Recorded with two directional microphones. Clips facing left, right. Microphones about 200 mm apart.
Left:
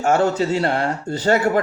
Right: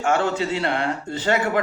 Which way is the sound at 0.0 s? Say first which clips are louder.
Left 4 dB; 40° left (ahead or behind).